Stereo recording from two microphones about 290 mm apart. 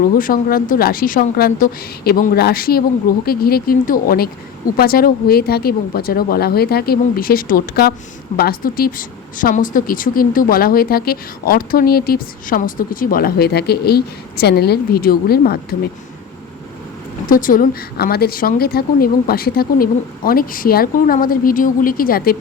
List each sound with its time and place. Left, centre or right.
0.2 s speech: left
17.2 s speech: left